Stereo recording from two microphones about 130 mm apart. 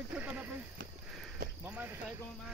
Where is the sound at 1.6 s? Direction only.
15° right (ahead or behind).